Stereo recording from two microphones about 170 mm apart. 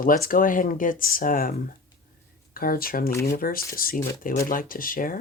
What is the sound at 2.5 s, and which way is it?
Speech, 60° left (ahead or behind).